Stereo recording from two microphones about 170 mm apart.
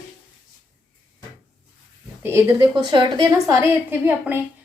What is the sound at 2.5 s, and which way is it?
A woman's voice, 25° right (ahead or behind).